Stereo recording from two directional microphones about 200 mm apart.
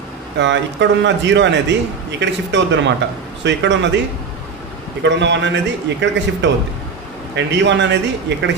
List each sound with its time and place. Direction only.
0.3 s a man's voice: 60° right (ahead or behind)
5.0 s a man's voice: 65° right (ahead or behind)